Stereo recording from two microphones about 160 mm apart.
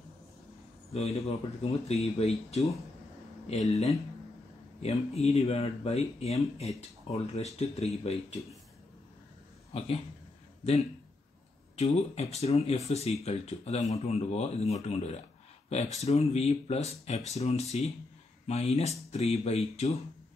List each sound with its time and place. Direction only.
0.9 s speech: 40° left (ahead or behind)
9.7 s speech: 40° left (ahead or behind)
11.7 s speech: 40° left (ahead or behind)